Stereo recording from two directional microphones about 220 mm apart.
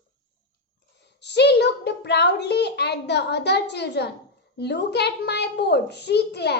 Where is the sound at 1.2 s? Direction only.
50° left (ahead or behind).